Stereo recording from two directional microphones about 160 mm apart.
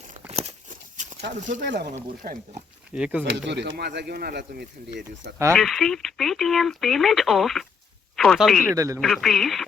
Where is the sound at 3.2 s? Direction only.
90° right.